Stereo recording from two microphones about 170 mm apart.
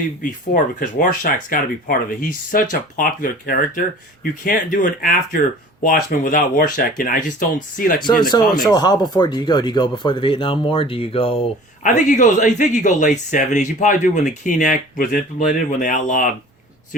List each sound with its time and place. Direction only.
0.2 s speech: 50° left (ahead or behind)
8.6 s speech: 25° left (ahead or behind)
11.8 s speech: 45° left (ahead or behind)